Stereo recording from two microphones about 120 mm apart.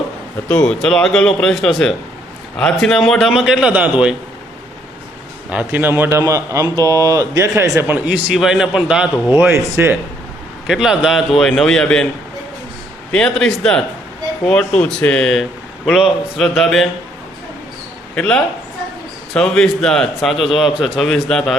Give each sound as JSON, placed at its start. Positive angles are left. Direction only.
{"t": 0.4, "sound": "a man's voice", "side_deg": 5}
{"t": 5.5, "sound": "a man's voice", "side_deg": -10}
{"t": 9.1, "sound": "speech", "side_deg": 35}
{"t": 9.4, "sound": "a man's voice", "side_deg": -20}
{"t": 10.7, "sound": "a man's voice", "side_deg": -5}
{"t": 13.1, "sound": "a man's voice", "side_deg": 5}
{"t": 18.1, "sound": "a man's voice", "side_deg": 10}